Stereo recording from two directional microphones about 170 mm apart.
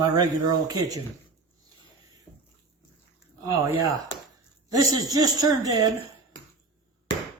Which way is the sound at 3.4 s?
20° right (ahead or behind).